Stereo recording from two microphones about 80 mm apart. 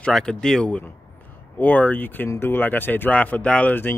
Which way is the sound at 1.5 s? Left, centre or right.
Left.